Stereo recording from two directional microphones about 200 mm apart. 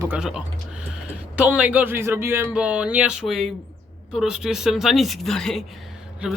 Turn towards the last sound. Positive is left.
turn(degrees=-5)  # may be behind; listen again after turning